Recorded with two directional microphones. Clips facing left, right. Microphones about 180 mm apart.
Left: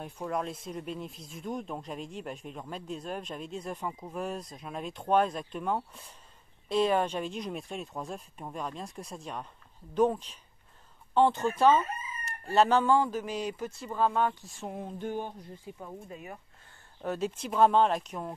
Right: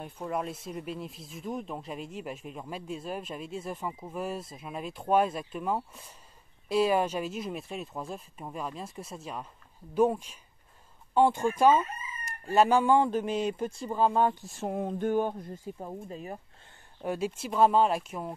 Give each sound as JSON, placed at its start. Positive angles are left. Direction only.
{"t": 0.0, "sound": "speech", "side_deg": -5}
{"t": 13.0, "sound": "speech", "side_deg": -25}
{"t": 14.7, "sound": "speech", "side_deg": -55}
{"t": 15.9, "sound": "speech", "side_deg": -30}
{"t": 17.0, "sound": "speech", "side_deg": -10}